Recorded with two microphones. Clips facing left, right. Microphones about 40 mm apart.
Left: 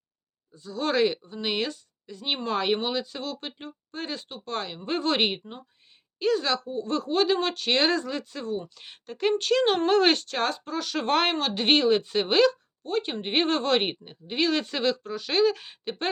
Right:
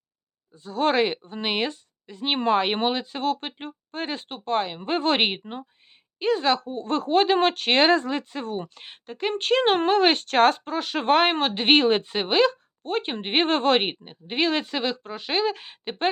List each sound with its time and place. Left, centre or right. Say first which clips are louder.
0.5 s speech: right 4 dB; right
6.7 s speech: right 3 dB; right
9.0 s speech: left 2 dB; centre
9.4 s speech: right 5 dB; right
9.9 s speech: even; centre
10.2 s speech: right 9 dB; right
12.1 s speech: even; right
12.8 s speech: right 1 dB; right
13.8 s speech: right 1 dB; right
14.6 s speech: left 1 dB; centre